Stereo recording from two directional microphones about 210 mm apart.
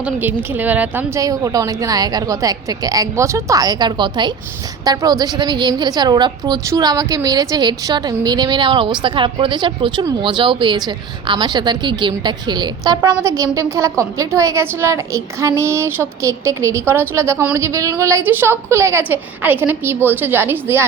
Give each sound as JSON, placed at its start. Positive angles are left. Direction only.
{"t": 0.0, "sound": "a woman's voice", "side_deg": -10}